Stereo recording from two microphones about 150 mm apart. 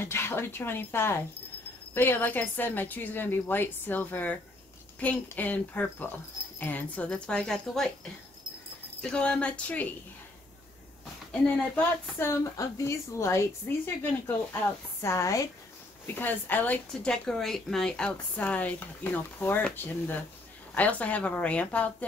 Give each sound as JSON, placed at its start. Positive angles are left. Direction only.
{"t": 0.0, "sound": "a woman's voice", "side_deg": 15}
{"t": 11.4, "sound": "a woman's voice", "side_deg": 10}